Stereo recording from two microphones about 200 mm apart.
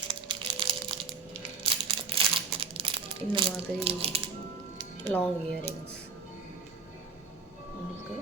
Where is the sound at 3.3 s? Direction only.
25° right (ahead or behind).